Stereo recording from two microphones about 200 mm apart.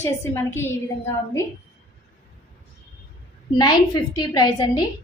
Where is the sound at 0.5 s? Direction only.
10° left (ahead or behind).